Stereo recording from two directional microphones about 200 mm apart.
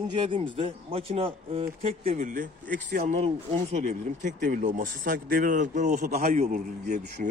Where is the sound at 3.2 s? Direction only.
30° right (ahead or behind).